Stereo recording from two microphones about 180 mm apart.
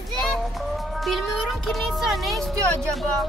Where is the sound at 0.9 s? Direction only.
Centre (ahead or behind).